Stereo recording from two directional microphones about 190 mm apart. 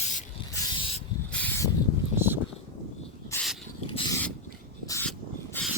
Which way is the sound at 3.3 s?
15° left (ahead or behind).